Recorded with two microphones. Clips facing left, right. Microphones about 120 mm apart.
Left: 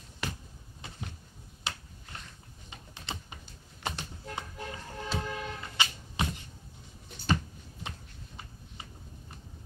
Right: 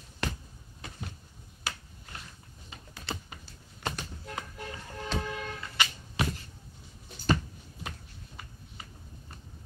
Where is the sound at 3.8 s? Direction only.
25° left (ahead or behind).